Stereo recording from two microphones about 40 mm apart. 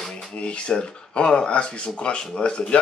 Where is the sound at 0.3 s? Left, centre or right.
Left.